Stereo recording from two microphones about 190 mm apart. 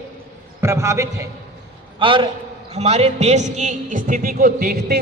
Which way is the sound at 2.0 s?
25° right (ahead or behind).